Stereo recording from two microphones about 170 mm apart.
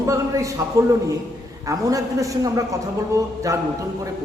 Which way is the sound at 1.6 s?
20° right (ahead or behind).